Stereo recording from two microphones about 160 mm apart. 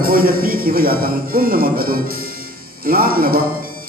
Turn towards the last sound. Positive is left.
turn(degrees=-65)  # may be behind; listen again after turning